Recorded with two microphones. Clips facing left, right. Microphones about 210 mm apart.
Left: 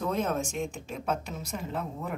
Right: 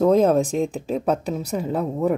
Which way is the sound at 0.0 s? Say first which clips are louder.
Right 13 dB; 35° right (ahead or behind).